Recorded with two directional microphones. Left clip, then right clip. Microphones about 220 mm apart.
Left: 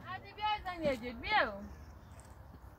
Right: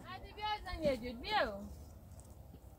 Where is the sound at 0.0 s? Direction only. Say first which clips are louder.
Left 5 dB; 15° right (ahead or behind).